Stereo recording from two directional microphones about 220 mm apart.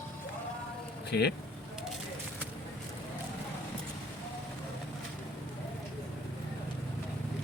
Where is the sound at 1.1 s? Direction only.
50° left (ahead or behind).